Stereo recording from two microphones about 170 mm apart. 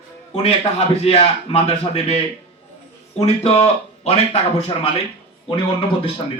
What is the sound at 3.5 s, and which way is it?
A man's voice, 35° left (ahead or behind).